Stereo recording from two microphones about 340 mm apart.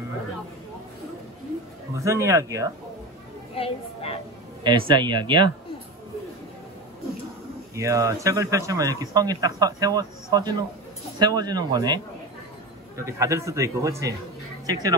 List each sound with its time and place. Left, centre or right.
2.0 s speech: centre
3.5 s a woman's voice: centre
4.6 s speech: centre
7.7 s speech: centre